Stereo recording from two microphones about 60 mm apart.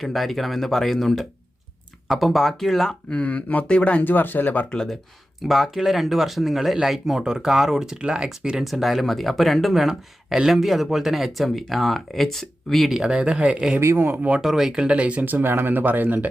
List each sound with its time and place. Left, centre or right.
0.0 s speech: centre
3.1 s speech: left
4.0 s speech: left
5.4 s speech: centre
12.9 s speech: centre
13.9 s speech: right
14.4 s speech: centre; by 16.2 s right